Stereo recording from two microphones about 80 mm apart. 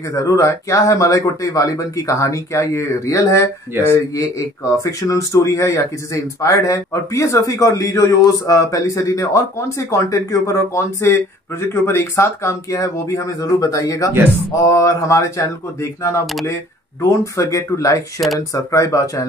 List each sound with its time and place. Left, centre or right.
0.1 s speech: left